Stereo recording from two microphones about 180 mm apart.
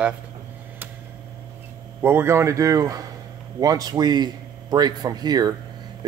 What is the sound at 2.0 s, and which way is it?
A man's voice, 15° right (ahead or behind).